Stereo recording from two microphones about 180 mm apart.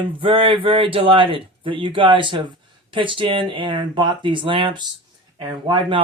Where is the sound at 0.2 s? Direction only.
30° right (ahead or behind).